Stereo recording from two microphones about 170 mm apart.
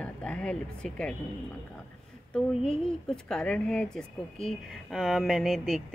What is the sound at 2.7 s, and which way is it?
Speech, 5° left (ahead or behind).